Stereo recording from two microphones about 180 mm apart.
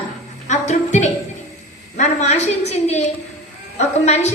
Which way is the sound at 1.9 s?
40° left (ahead or behind).